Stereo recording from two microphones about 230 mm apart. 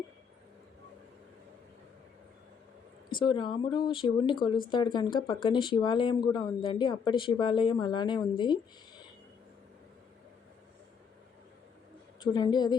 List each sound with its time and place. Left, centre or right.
3.2 s speech: left
12.2 s a woman's voice: centre